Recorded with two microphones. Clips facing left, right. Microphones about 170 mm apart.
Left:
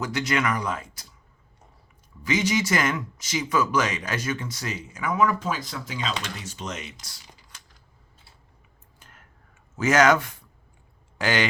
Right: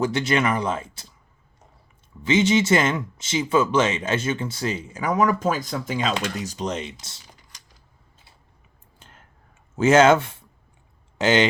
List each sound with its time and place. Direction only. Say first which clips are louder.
0.0 s speech: right 4 dB; 30° right (ahead or behind)
2.2 s speech: right 5 dB; 25° right (ahead or behind)
9.0 s a sound: right 3 dB; 25° right (ahead or behind)
9.7 s speech: right 4 dB; 25° right (ahead or behind)